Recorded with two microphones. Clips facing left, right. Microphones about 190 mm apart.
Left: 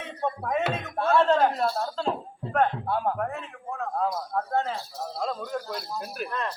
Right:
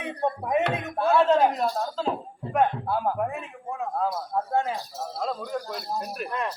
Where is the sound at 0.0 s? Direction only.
15° right (ahead or behind).